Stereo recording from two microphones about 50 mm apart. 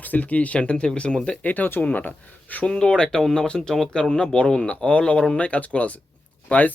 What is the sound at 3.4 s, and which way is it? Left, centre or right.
Speech, centre.